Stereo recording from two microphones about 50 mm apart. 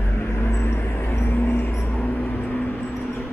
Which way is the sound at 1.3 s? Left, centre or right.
Left.